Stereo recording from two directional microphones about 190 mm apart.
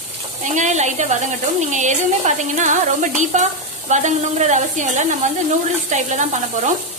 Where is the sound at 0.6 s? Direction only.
40° right (ahead or behind).